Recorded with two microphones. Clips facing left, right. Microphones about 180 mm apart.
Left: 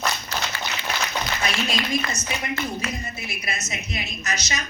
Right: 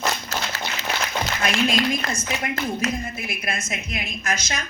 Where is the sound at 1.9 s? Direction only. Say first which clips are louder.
Right 1 dB; 50° right (ahead or behind).